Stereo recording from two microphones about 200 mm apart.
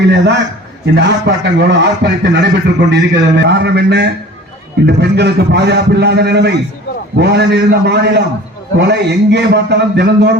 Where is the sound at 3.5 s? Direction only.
55° right (ahead or behind).